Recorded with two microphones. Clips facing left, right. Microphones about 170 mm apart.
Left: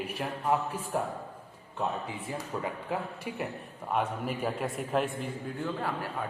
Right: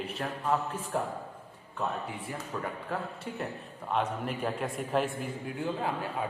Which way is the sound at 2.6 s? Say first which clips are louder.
Left 1 dB; 15° left (ahead or behind).